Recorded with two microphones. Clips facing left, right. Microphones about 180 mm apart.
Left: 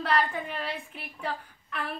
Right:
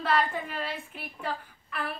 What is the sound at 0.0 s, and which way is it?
A woman's voice, centre (ahead or behind).